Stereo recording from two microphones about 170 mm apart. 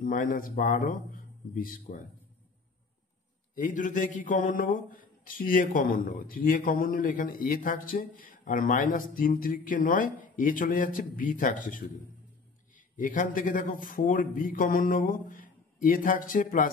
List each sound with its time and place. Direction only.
0.0 s speech: 50° left (ahead or behind)
3.5 s speech: 50° left (ahead or behind)